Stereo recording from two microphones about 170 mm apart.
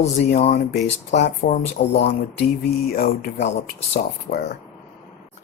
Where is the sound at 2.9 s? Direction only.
60° left (ahead or behind).